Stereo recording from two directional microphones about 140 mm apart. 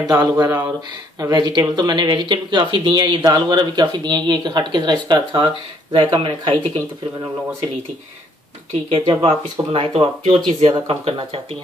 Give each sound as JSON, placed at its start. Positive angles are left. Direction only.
{"t": 0.1, "sound": "speech", "side_deg": -25}
{"t": 8.9, "sound": "speech", "side_deg": -40}